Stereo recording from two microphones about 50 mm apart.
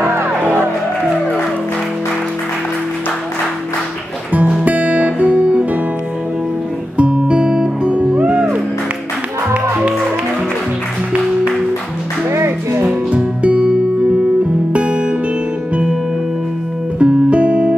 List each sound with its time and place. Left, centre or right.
4.6 s music: right
7.0 s music: right
12.3 s music: right
13.1 s music: right
17.0 s music: right